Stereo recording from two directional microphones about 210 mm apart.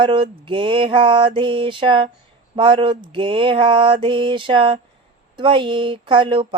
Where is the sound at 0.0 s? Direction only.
25° right (ahead or behind).